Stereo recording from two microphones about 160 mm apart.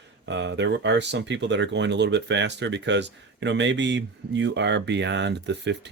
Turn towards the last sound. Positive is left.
turn(degrees=-90)